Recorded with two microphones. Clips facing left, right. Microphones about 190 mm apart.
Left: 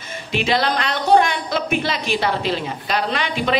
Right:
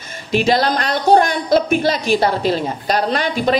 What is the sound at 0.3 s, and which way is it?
A woman's voice, 40° right (ahead or behind).